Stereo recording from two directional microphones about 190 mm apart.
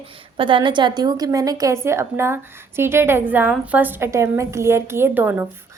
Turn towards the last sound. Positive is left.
turn(degrees=-10)  # may be behind; listen again after turning